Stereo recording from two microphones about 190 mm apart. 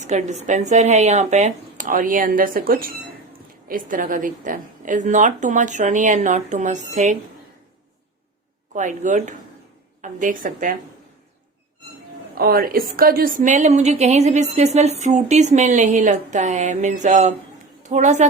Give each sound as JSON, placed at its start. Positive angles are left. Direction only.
{"t": 0.0, "sound": "a woman's voice", "side_deg": -40}
{"t": 8.7, "sound": "a woman's voice", "side_deg": -40}
{"t": 12.3, "sound": "a woman's voice", "side_deg": -50}